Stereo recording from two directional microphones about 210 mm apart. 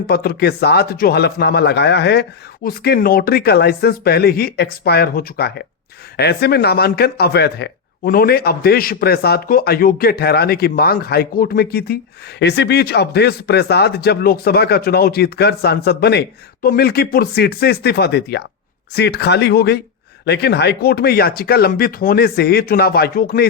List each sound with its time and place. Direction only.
0.1 s speech: 50° left (ahead or behind)